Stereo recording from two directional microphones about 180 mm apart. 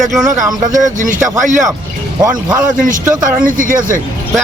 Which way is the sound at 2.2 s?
20° right (ahead or behind).